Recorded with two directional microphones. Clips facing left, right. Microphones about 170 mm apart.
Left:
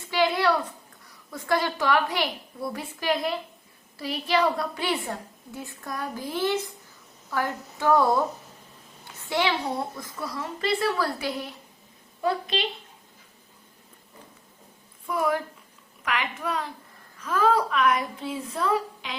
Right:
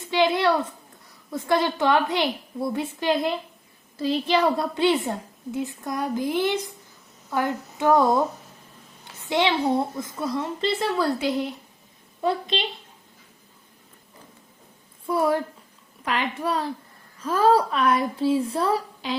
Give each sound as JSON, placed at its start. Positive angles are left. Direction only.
{"t": 0.1, "sound": "a sound", "side_deg": -20}
{"t": 1.3, "sound": "a woman's voice", "side_deg": -25}
{"t": 9.3, "sound": "a woman's voice", "side_deg": -25}
{"t": 15.0, "sound": "a woman's voice", "side_deg": -30}